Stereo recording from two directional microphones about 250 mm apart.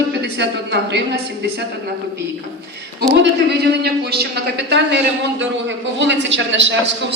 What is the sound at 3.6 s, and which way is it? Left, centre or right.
A man's voice, right.